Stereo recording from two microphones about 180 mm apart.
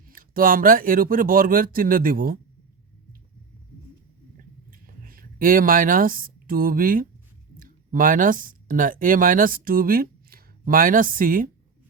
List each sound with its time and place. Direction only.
0.0 s speech: 50° right (ahead or behind)
4.7 s speech: 50° right (ahead or behind)